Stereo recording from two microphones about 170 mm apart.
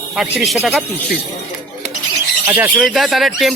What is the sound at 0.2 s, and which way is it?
Speech, centre (ahead or behind).